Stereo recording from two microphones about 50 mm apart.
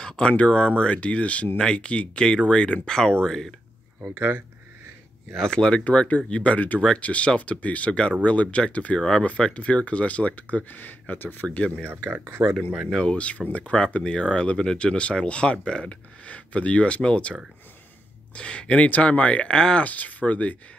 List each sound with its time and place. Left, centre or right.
0.0 s speech: centre
4.0 s speech: right
5.3 s speech: centre
5.9 s speech: left
11.4 s speech: left
12.1 s speech: right
13.0 s speech: left
19.9 s speech: left